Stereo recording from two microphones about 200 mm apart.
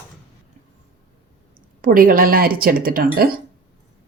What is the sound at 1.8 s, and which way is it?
Speech, 45° right (ahead or behind).